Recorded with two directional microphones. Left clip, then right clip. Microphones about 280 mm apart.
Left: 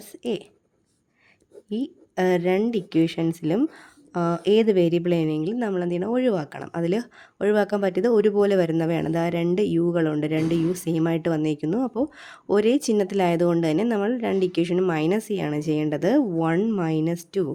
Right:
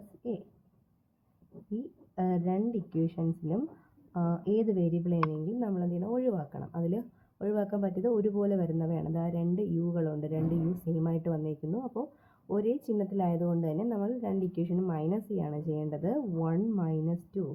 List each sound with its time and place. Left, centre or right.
2.1 s speech: left
8.0 s speech: left